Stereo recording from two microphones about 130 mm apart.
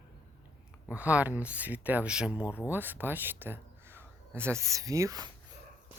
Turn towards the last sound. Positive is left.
turn(degrees=-30)  # may be behind; listen again after turning